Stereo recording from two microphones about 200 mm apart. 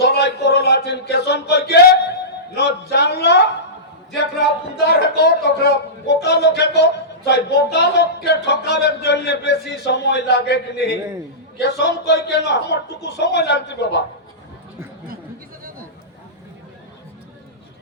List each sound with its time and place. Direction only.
0.0 s a sound: 55° left (ahead or behind)
2.6 s speech: 55° left (ahead or behind)
5.2 s speech: 55° left (ahead or behind)